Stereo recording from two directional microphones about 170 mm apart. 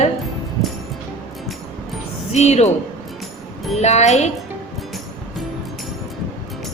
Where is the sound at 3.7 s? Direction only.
40° left (ahead or behind).